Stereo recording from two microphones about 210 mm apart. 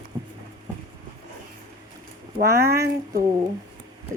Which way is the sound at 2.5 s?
50° right (ahead or behind).